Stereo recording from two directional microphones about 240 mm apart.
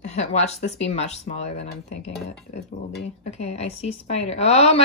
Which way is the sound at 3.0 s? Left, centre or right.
Left.